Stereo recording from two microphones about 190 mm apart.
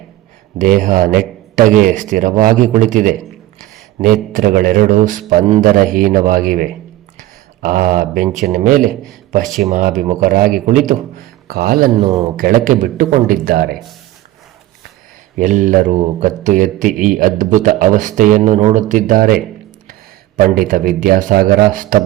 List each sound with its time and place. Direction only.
0.6 s a man's voice: 45° right (ahead or behind)
7.2 s a sound: 45° right (ahead or behind)
8.4 s a man's voice: 40° right (ahead or behind)
11.9 s a man's voice: 25° right (ahead or behind)
12.4 s a man's voice: 45° right (ahead or behind)
15.4 s a man's voice: 40° right (ahead or behind)